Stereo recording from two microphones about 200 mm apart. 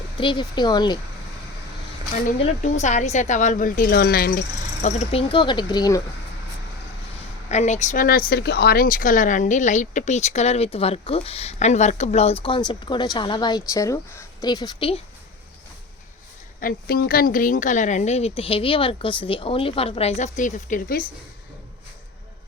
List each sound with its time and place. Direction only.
0.2 s speech: 25° left (ahead or behind)
2.2 s speech: 35° left (ahead or behind); by 4.4 s 55° left (ahead or behind)
4.8 s speech: 35° left (ahead or behind)
7.5 s speech: 35° left (ahead or behind)
16.6 s speech: 50° left (ahead or behind)